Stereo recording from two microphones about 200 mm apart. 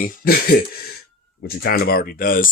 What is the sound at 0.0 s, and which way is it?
Speech, 45° left (ahead or behind).